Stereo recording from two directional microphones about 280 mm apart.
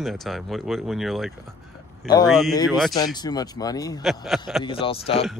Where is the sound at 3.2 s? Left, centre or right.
Centre.